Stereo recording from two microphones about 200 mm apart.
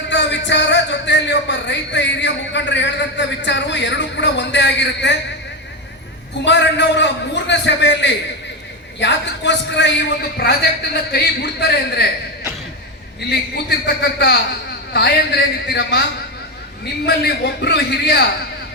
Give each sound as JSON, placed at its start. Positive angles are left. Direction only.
{"t": 0.1, "sound": "a man's voice", "side_deg": 60}
{"t": 6.4, "sound": "a man's voice", "side_deg": 60}
{"t": 10.4, "sound": "a man's voice", "side_deg": 50}
{"t": 13.3, "sound": "a man's voice", "side_deg": 55}
{"t": 17.1, "sound": "a man's voice", "side_deg": 55}